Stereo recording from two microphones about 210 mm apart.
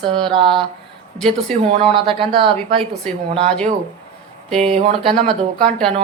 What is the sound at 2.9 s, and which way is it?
Speech, 5° left (ahead or behind).